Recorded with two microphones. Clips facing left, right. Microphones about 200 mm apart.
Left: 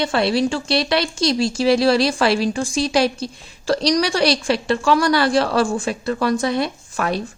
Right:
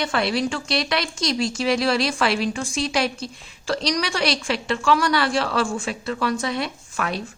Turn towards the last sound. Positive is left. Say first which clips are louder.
# left 5 dB
turn(degrees=40)  # may be behind; listen again after turning